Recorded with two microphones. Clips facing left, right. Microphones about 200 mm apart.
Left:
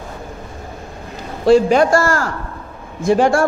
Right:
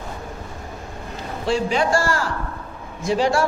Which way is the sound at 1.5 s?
45° left (ahead or behind).